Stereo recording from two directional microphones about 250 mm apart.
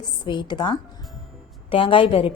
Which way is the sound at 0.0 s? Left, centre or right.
Centre.